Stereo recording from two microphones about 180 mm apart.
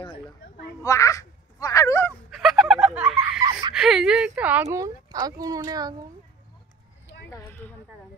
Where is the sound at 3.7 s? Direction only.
5° right (ahead or behind); by 5.9 s 20° right (ahead or behind).